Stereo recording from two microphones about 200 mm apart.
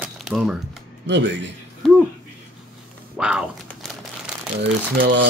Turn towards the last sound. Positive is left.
turn(degrees=-55)  # may be behind; listen again after turning